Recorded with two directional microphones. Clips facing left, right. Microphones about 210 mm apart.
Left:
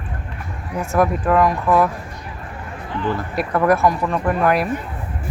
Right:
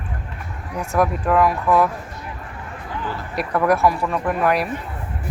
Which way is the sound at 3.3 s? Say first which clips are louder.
Left 1 dB; centre (ahead or behind).